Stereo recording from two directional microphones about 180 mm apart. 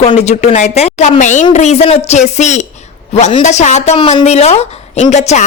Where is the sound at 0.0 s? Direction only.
35° left (ahead or behind).